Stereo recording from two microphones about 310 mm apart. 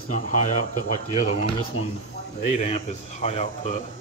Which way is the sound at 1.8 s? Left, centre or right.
Left.